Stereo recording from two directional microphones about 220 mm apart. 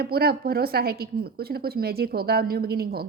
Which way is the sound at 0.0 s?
45° right (ahead or behind).